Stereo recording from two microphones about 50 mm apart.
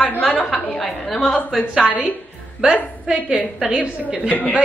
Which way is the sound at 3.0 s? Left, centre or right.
Right.